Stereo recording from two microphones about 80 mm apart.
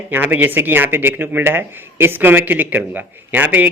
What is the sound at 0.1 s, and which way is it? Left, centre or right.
Speech, right.